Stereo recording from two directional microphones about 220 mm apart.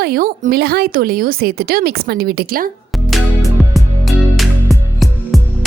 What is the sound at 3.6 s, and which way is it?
Music, centre (ahead or behind).